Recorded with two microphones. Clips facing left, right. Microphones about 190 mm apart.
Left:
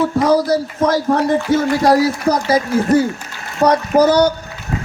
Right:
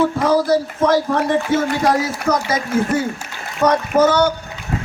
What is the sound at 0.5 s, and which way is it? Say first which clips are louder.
Speech: even; 40° left (ahead or behind).